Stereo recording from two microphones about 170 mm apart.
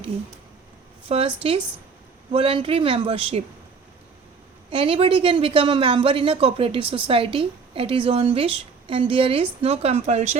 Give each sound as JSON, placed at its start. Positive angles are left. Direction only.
{"t": 1.0, "sound": "speech", "side_deg": -35}
{"t": 4.7, "sound": "speech", "side_deg": -35}